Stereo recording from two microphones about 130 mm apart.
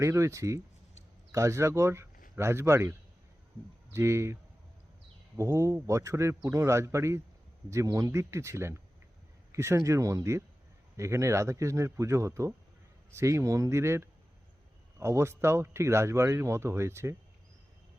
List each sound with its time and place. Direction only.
0.0 s speech: 20° right (ahead or behind)
3.9 s speech: 20° right (ahead or behind)
5.4 s speech: 20° right (ahead or behind)